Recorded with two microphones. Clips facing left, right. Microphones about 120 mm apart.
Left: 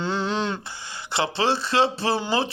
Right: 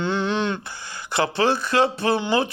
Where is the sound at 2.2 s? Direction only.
30° left (ahead or behind).